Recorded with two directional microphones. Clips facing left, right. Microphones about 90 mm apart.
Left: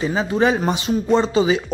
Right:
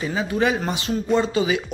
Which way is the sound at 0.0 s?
30° left (ahead or behind).